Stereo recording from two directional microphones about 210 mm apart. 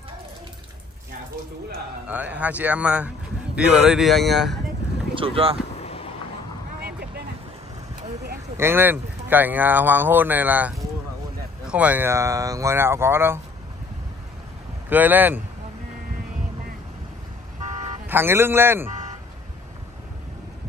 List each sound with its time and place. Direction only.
2.0 s speech: 5° right (ahead or behind)
5.1 s speech: 25° right (ahead or behind)
5.8 s a sound: 30° left (ahead or behind)
6.8 s vehicle: 50° right (ahead or behind)
8.5 s speech: 10° right (ahead or behind)
14.9 s speech: 10° right (ahead or behind)
18.0 s speech: 10° right (ahead or behind)